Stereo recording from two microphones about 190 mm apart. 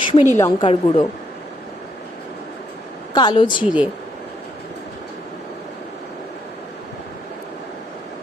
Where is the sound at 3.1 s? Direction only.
25° left (ahead or behind).